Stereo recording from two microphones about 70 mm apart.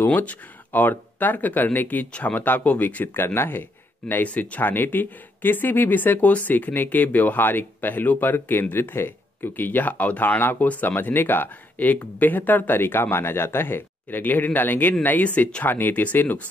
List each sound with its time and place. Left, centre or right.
0.0 s speech: left